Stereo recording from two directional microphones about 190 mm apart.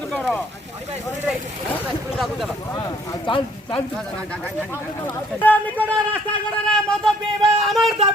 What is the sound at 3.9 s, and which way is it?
Speech, 5° left (ahead or behind).